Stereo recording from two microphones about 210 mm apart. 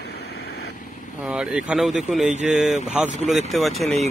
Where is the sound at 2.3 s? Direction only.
35° right (ahead or behind).